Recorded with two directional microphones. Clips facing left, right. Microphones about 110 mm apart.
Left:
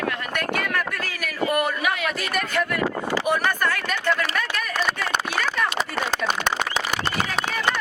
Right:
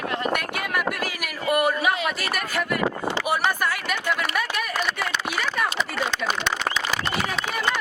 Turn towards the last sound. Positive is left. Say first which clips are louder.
# left 1 dB
turn(degrees=45)  # may be behind; listen again after turning